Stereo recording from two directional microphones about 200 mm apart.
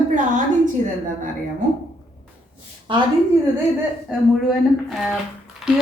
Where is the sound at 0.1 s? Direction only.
40° right (ahead or behind).